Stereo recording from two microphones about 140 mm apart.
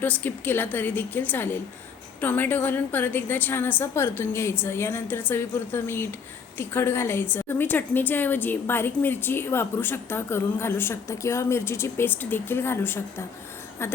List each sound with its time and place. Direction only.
0.0 s a woman's voice: 15° left (ahead or behind)